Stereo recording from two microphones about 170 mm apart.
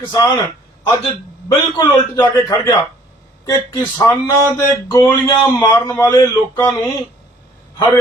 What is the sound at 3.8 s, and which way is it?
Speech, 15° left (ahead or behind).